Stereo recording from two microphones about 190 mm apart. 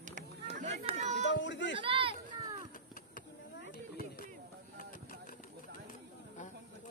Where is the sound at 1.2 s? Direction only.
70° left (ahead or behind).